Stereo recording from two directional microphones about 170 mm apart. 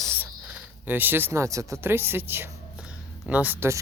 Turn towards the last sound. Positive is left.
turn(degrees=-10)  # may be behind; listen again after turning